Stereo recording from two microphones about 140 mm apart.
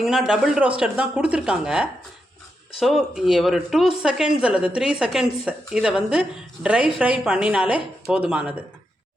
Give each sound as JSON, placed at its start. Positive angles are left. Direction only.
{"t": 0.0, "sound": "a man's voice", "side_deg": -5}